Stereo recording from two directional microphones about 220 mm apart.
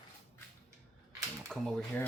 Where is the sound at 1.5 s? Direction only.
Centre (ahead or behind).